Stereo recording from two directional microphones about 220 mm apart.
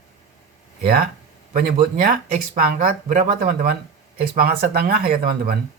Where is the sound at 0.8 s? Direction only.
45° right (ahead or behind).